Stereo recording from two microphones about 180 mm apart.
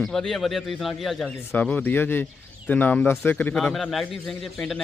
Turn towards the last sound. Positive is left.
turn(degrees=0)  # may be behind; listen again after turning